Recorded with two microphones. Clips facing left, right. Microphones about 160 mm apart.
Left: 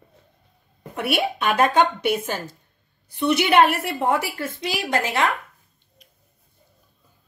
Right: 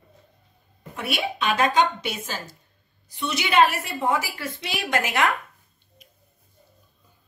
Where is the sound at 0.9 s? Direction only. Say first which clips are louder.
Left 5 dB; 60° left (ahead or behind).